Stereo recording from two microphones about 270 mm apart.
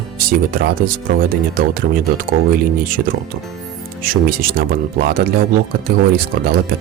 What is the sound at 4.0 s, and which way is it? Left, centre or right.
Speech, right.